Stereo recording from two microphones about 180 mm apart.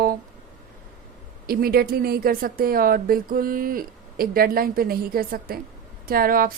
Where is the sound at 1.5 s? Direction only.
55° right (ahead or behind).